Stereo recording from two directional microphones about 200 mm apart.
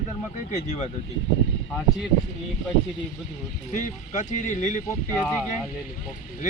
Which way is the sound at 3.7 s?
40° left (ahead or behind).